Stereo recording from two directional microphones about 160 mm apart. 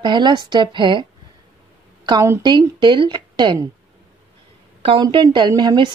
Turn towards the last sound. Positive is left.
turn(degrees=-30)  # may be behind; listen again after turning